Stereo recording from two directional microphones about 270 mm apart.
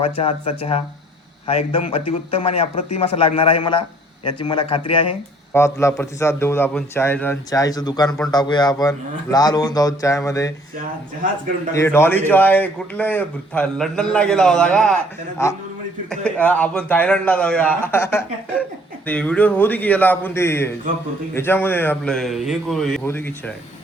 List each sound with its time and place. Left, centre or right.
0.0 s a man's voice: left
4.9 s a man's voice: centre
11.7 s a man's voice: centre